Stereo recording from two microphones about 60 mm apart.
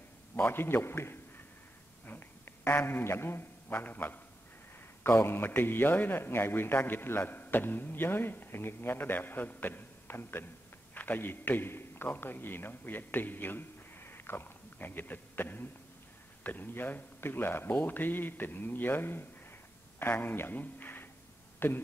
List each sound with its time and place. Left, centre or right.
0.5 s a man's voice: left
5.2 s a man's voice: left